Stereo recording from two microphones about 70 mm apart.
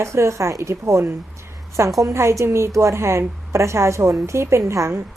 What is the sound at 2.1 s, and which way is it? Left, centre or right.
A woman's voice, right.